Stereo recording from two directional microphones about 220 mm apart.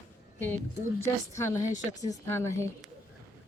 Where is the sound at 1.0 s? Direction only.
15° left (ahead or behind).